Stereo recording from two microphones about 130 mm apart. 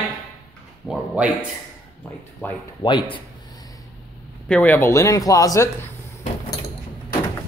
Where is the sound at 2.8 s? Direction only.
40° left (ahead or behind).